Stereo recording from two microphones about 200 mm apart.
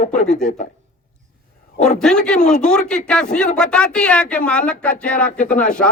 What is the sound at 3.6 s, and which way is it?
Speech, 5° left (ahead or behind).